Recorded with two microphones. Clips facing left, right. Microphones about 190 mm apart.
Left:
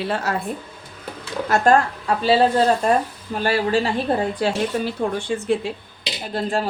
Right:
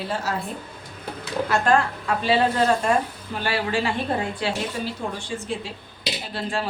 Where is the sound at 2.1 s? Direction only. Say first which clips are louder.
Left 3 dB; 35° left (ahead or behind).